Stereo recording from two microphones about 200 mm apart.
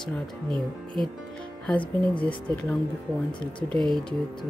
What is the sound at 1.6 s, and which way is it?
Speech, 5° left (ahead or behind).